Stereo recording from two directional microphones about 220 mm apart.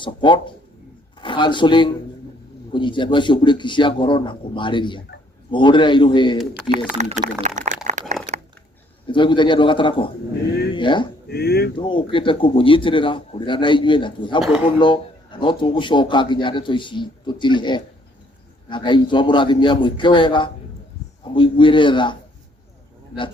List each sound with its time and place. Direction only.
0.0 s a man's voice: 20° left (ahead or behind)
7.0 s speech: 35° right (ahead or behind)
8.1 s a sound: 30° right (ahead or behind)
9.0 s a man's voice: 20° left (ahead or behind)
11.3 s speech: 45° left (ahead or behind)
11.8 s a man's voice: 25° left (ahead or behind)